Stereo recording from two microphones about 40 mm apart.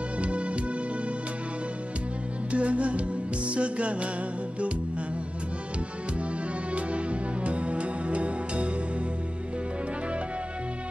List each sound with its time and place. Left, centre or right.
0.2 s music: right
2.5 s music: right
6.7 s music: right